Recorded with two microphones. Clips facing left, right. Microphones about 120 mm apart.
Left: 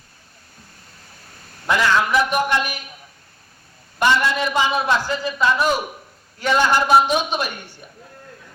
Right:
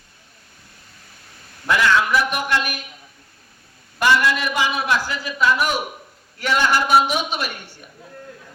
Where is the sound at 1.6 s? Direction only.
20° left (ahead or behind).